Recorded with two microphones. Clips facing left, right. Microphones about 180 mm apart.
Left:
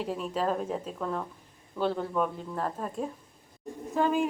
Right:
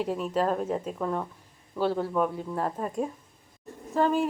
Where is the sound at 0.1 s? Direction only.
5° right (ahead or behind).